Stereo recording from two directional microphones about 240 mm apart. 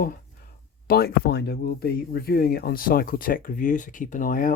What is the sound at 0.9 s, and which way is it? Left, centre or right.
Speech, left.